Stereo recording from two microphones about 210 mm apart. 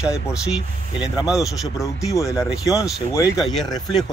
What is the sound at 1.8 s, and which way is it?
Speech, 15° left (ahead or behind).